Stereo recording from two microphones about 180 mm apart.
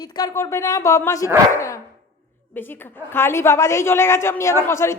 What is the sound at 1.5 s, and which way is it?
Dog, 15° left (ahead or behind).